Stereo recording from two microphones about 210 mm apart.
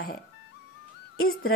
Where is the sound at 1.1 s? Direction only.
45° left (ahead or behind).